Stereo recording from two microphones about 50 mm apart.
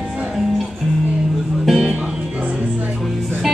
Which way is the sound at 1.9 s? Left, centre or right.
Right.